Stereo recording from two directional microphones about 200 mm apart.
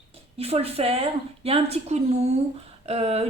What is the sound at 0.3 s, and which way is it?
A woman's voice, 30° right (ahead or behind).